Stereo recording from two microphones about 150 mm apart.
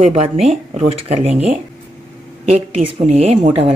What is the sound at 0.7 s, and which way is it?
Speech, 40° right (ahead or behind).